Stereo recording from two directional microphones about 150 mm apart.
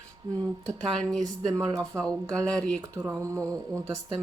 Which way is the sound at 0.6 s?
5° left (ahead or behind).